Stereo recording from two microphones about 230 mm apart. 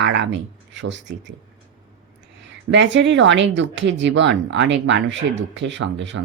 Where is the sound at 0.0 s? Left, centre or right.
Right.